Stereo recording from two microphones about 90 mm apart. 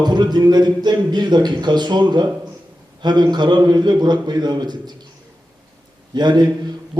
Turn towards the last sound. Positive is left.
turn(degrees=-55)  # may be behind; listen again after turning